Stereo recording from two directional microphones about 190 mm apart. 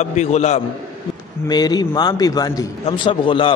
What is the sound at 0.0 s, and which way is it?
Speech, 35° left (ahead or behind).